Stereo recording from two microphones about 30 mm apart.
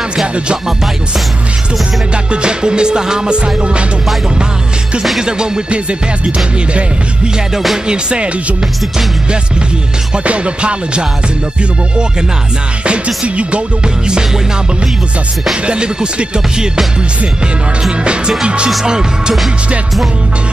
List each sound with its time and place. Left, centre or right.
2.3 s speech: right
3.3 s music: right
5.7 s music: right
7.8 s music: right
10.2 s music: right
12.8 s music: right
15.6 s speech: right
18.0 s music: right
18.9 s speech: right